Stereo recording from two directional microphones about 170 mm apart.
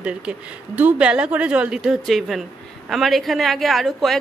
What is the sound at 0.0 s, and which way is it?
A woman's voice, 5° right (ahead or behind).